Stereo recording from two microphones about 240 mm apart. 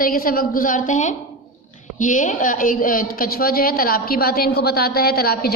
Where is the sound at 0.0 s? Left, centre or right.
Left.